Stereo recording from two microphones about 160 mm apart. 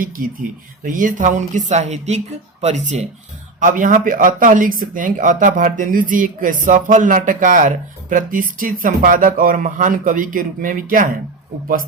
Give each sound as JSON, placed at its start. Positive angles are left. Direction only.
{"t": 0.9, "sound": "speech", "side_deg": -55}